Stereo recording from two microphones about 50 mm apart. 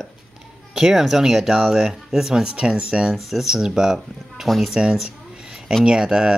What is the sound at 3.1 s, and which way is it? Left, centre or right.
Speech, centre.